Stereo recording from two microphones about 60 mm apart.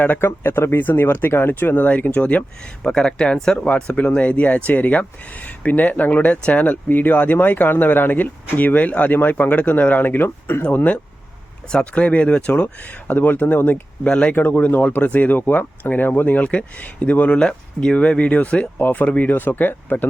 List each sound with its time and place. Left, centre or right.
0.0 s speech: left
0.8 s speech: left
10.6 s speech: left
14.0 s speech: centre
14.3 s speech: left